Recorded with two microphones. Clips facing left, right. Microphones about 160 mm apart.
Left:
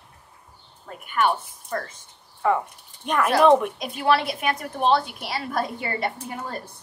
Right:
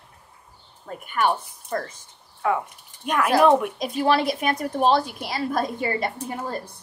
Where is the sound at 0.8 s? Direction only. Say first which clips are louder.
Even; 40° right (ahead or behind).